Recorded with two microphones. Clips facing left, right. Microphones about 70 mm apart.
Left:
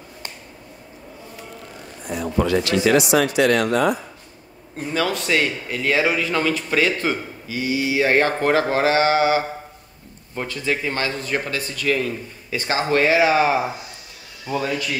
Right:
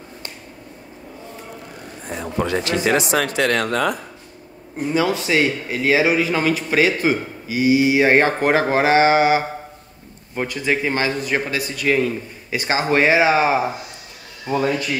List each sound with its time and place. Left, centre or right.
2.0 s a man's voice: right
3.2 s speech: right
4.7 s a man's voice: centre
14.5 s speech: right